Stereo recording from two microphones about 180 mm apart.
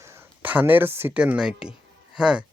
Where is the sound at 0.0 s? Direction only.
15° right (ahead or behind).